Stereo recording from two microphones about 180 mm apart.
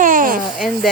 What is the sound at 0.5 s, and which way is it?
Speech, centre (ahead or behind).